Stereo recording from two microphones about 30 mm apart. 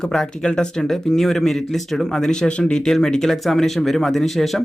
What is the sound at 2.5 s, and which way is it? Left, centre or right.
Speech, left.